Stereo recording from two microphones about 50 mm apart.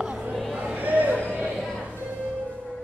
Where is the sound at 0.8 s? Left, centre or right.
Right.